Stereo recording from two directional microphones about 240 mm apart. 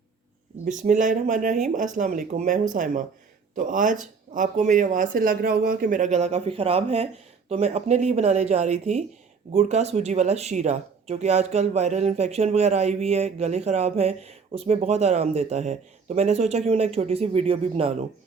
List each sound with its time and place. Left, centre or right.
0.6 s speech: right